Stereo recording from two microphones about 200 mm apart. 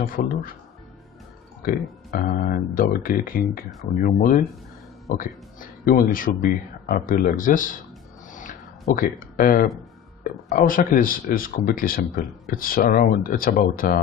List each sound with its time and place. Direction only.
0.0 s speech: 45° left (ahead or behind)
1.6 s speech: 45° left (ahead or behind)
8.3 s a sound: 40° left (ahead or behind)
10.5 s speech: 45° left (ahead or behind)